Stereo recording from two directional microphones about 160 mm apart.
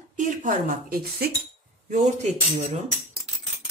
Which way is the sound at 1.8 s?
45° right (ahead or behind).